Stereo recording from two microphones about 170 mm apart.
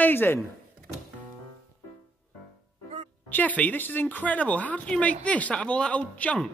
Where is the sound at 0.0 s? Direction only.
10° left (ahead or behind).